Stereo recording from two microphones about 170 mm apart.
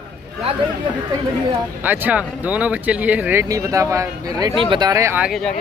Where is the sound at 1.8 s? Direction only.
10° right (ahead or behind).